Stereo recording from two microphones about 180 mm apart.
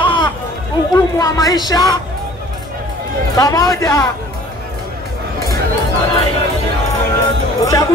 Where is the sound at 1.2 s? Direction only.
20° left (ahead or behind).